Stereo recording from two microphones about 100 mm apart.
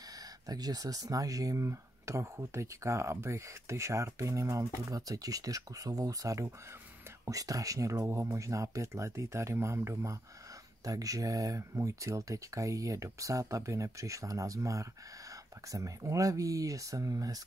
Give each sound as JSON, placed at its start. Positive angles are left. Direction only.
{"t": 0.5, "sound": "speech", "side_deg": -40}